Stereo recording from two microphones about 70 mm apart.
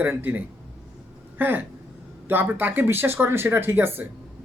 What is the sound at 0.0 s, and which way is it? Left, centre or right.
A man's voice, right.